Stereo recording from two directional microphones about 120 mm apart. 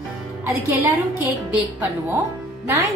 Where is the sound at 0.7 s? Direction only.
15° right (ahead or behind).